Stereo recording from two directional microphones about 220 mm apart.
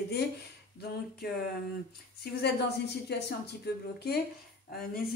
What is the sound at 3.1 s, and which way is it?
Speech, 50° left (ahead or behind).